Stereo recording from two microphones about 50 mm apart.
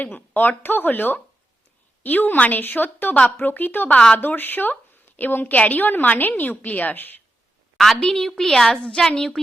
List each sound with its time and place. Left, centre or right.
0.0 s a woman's voice: left
3.8 s speech: left
4.2 s a woman's voice: left
8.0 s a woman's voice: centre